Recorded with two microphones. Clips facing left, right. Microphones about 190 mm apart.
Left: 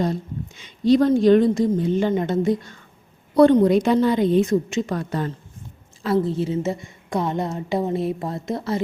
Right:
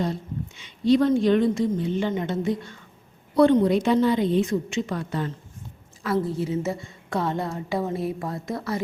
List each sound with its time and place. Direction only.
0.0 s a woman's voice: 45° left (ahead or behind)
6.1 s a woman's voice: 25° left (ahead or behind)